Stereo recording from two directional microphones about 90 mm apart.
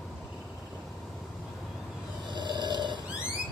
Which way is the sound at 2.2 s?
55° right (ahead or behind).